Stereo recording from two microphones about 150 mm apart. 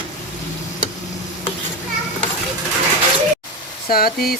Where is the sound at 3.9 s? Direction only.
85° left.